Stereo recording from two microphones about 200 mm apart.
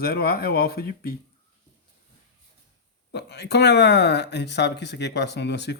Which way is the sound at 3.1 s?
55° left (ahead or behind).